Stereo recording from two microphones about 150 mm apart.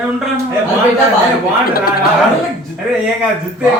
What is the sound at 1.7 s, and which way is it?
Speech, 80° left.